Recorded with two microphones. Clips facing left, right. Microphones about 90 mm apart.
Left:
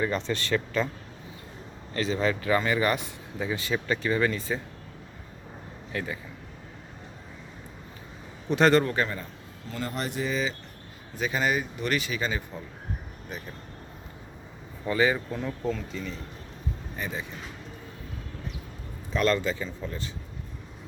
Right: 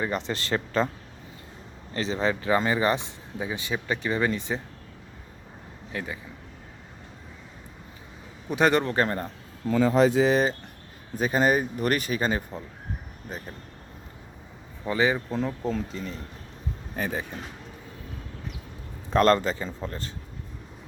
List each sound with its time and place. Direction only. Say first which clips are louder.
0.0 s speech: left 1 dB; 20° right (ahead or behind)
1.9 s speech: even; 25° right (ahead or behind)
5.9 s a man's voice: left 1 dB; 20° right (ahead or behind)
8.4 s a man's voice: left 1 dB; 15° right (ahead or behind)
8.8 s speech: right 2 dB; 30° right (ahead or behind)
10.2 s speech: right 9 dB; 85° right
11.2 s speech: right 5 dB; 40° right (ahead or behind)
14.8 s speech: even; 20° right (ahead or behind)
17.0 s speech: right 5 dB; 60° right (ahead or behind)
19.1 s speech: right 5 dB; 45° right (ahead or behind)